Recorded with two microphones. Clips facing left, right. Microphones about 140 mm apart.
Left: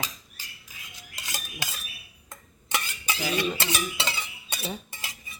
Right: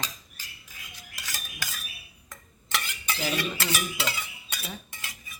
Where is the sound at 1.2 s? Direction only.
25° left (ahead or behind).